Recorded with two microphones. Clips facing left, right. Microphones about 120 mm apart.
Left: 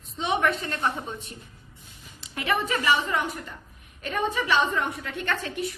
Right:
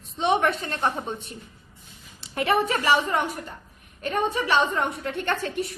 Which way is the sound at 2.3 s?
40° right (ahead or behind).